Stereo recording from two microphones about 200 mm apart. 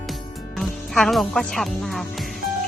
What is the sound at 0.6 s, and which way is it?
Speech, centre (ahead or behind).